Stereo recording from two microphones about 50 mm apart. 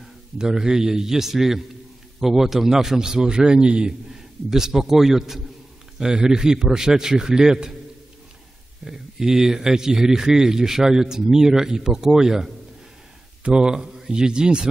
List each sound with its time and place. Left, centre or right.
0.4 s speech: centre
8.8 s speech: centre